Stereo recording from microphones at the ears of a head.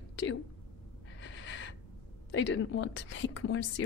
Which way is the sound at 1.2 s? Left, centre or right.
Left.